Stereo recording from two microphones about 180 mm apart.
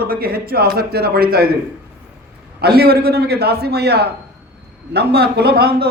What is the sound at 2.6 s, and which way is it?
A man's voice, 60° right (ahead or behind).